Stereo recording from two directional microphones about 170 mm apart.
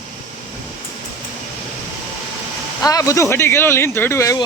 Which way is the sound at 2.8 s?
20° left (ahead or behind).